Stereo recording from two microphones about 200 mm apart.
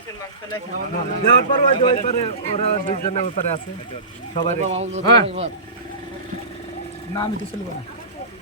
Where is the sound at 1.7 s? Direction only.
25° left (ahead or behind).